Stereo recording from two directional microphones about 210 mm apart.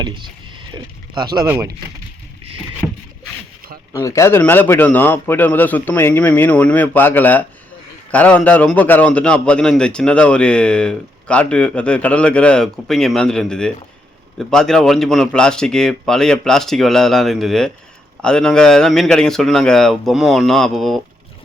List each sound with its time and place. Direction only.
0.0 s speech: 20° right (ahead or behind)
0.7 s oink: 20° right (ahead or behind)
1.5 s speech: 15° right (ahead or behind)
3.9 s a man's voice: 15° left (ahead or behind)